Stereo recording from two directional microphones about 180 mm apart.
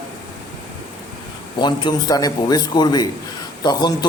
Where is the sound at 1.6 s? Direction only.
25° left (ahead or behind).